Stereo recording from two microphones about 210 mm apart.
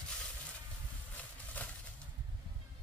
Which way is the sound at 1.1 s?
10° left (ahead or behind).